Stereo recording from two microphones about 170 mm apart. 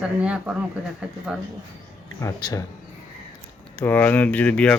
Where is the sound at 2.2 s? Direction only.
20° left (ahead or behind).